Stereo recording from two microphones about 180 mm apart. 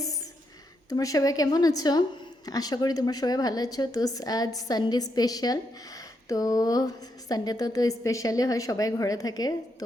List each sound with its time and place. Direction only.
0.9 s speech: 20° left (ahead or behind)